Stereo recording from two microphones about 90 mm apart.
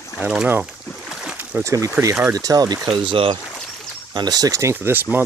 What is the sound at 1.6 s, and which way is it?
Speech, 35° right (ahead or behind).